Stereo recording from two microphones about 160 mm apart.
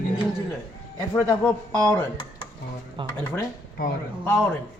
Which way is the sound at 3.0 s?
30° right (ahead or behind).